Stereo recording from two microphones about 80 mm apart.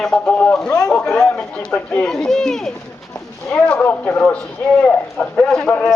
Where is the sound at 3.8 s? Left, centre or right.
Centre.